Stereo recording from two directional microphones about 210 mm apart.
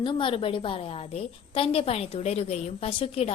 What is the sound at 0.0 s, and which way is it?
A woman's voice, 25° left (ahead or behind).